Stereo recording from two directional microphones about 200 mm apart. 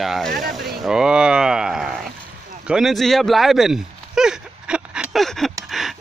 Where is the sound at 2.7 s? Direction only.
Centre (ahead or behind).